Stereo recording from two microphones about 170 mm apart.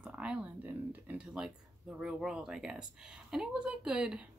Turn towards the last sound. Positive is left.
turn(degrees=-5)  # may be behind; listen again after turning